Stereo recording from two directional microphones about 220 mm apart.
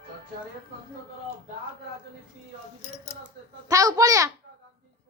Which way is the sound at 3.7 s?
15° right (ahead or behind).